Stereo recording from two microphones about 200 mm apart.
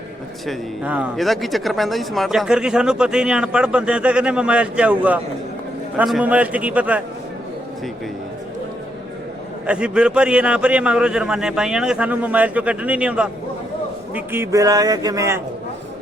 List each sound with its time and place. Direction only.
0.4 s a man's voice: 5° right (ahead or behind)
9.6 s a man's voice: 5° right (ahead or behind)